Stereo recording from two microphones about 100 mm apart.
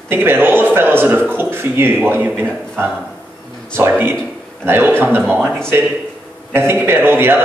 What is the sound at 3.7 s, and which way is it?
A man's voice, 20° right (ahead or behind).